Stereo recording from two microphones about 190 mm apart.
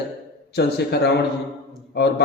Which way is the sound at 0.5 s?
60° left (ahead or behind).